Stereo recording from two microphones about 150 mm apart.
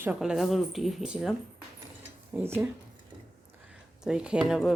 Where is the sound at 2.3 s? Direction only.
15° right (ahead or behind).